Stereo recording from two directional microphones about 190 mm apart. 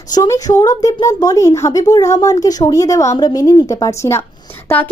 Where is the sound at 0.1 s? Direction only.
20° left (ahead or behind).